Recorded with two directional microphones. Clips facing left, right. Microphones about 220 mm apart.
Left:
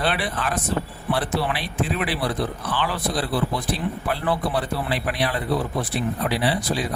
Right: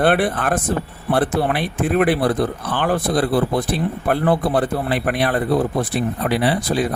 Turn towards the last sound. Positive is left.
turn(degrees=-55)  # may be behind; listen again after turning